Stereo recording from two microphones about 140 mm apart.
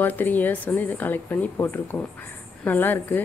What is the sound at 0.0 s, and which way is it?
Speech, 15° left (ahead or behind).